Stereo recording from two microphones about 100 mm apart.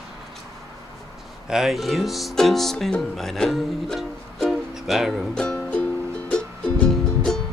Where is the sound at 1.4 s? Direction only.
5° right (ahead or behind).